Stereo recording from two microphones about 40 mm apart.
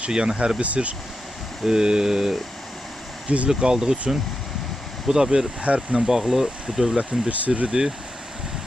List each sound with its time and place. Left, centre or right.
0.1 s speech: right
1.6 s speech: centre
3.2 s speech: right
3.6 s speech: right
6.2 s speech: centre
7.0 s speech: right
7.7 s speech: centre